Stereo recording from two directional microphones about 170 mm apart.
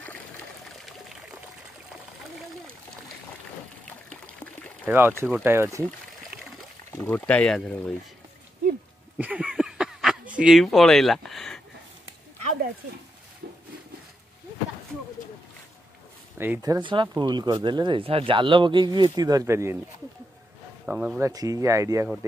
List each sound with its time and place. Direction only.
0.8 s pour: centre (ahead or behind)
3.8 s trickle: 5° left (ahead or behind)
4.8 s speech: 15° right (ahead or behind)
6.9 s speech: 15° left (ahead or behind)
9.2 s a sound: 5° right (ahead or behind)
16.3 s speech: 15° right (ahead or behind)
20.8 s a sound: 5° right (ahead or behind)
21.2 s speech: 20° right (ahead or behind)